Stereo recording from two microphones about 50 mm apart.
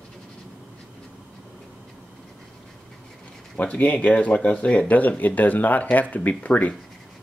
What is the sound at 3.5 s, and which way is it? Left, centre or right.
Speech, left.